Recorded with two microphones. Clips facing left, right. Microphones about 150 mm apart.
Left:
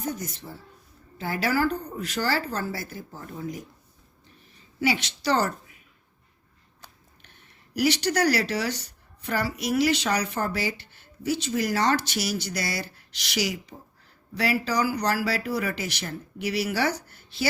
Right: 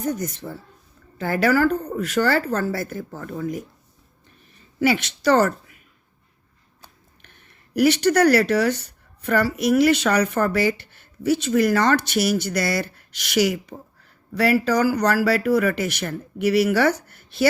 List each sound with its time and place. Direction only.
0.4 s a woman's voice: 55° right (ahead or behind)
4.8 s a woman's voice: 55° right (ahead or behind)
7.7 s a woman's voice: 55° right (ahead or behind)